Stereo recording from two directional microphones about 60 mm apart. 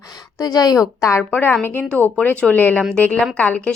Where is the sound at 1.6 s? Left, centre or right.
Left.